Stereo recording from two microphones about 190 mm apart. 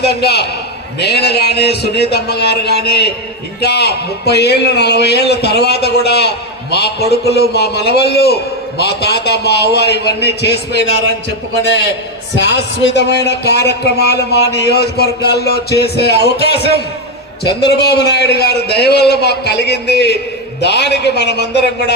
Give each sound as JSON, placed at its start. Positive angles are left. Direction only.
{"t": 0.0, "sound": "speech", "side_deg": 60}
{"t": 12.5, "sound": "speech", "side_deg": 65}
{"t": 17.7, "sound": "speech", "side_deg": 60}